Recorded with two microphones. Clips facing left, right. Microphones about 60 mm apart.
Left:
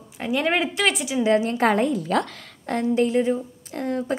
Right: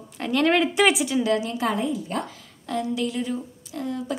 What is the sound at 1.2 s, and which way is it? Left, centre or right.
Speech, left.